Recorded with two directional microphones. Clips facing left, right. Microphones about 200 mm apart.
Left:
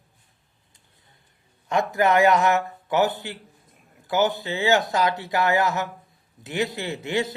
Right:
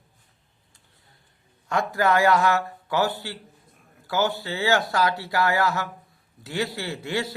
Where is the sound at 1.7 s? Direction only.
20° left (ahead or behind).